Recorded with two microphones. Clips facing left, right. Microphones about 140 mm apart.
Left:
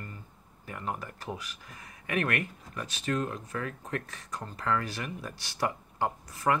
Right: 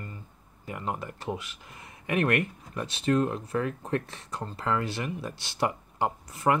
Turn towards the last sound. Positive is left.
turn(degrees=-25)  # may be behind; listen again after turning